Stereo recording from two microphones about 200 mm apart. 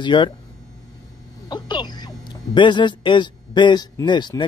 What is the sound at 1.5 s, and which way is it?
Speech, 20° left (ahead or behind).